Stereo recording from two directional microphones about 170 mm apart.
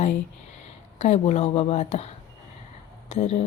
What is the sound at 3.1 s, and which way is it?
Speech, 40° left (ahead or behind).